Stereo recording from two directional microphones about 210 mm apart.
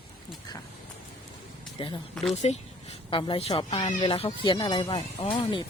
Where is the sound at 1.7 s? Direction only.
25° left (ahead or behind).